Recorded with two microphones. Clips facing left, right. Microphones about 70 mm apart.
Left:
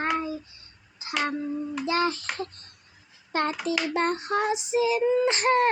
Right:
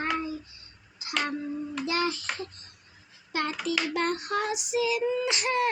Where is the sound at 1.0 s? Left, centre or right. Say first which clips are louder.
Left 3 dB; left.